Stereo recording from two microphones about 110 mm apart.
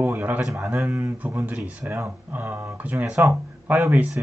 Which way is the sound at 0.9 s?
20° right (ahead or behind).